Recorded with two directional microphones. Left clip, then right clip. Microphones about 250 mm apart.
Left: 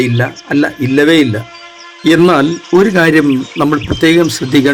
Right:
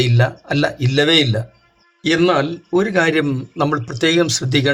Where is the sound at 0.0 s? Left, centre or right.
Centre.